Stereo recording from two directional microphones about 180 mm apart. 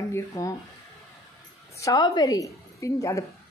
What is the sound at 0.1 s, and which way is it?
Speech, 20° left (ahead or behind).